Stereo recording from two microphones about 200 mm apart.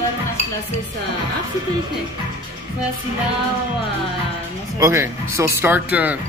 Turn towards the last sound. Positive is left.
turn(degrees=-10)  # may be behind; listen again after turning